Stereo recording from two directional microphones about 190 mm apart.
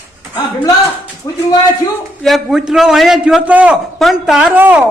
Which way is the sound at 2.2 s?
Centre (ahead or behind).